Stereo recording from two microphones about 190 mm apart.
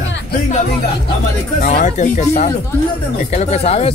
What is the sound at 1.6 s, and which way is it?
Speech, 45° left (ahead or behind).